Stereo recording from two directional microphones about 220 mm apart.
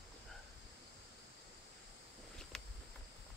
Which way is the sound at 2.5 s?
5° left (ahead or behind).